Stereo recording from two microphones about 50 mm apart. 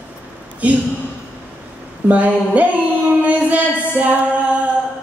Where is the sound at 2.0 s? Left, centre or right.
Right.